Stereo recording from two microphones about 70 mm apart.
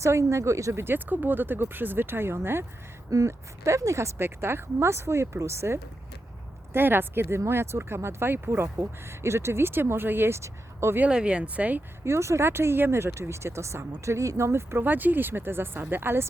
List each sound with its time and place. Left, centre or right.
0.0 s speech: right
3.1 s speech: right
11.1 s speech: centre
12.0 s speech: right